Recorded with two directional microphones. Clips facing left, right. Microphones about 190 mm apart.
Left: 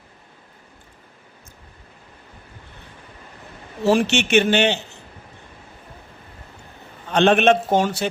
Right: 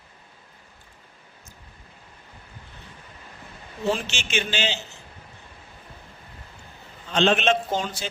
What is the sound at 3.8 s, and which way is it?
Speech, 70° left (ahead or behind).